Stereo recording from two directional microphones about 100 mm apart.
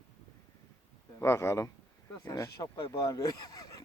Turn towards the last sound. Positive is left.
turn(degrees=40)  # may be behind; listen again after turning